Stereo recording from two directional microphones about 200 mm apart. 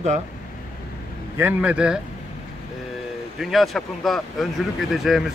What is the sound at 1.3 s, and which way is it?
Speech, 10° right (ahead or behind).